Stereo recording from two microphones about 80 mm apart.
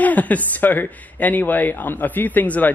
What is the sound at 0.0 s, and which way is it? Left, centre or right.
Speech, centre.